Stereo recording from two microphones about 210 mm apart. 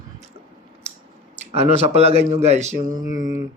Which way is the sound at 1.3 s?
30° right (ahead or behind).